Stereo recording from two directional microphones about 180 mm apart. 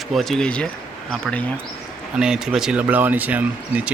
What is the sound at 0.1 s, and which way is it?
Speech, centre (ahead or behind).